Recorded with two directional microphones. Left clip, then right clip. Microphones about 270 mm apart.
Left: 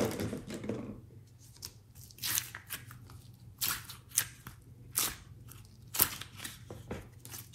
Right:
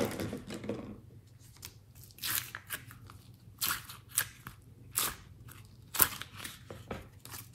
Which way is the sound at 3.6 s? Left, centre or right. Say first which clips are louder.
Right 1 dB; centre.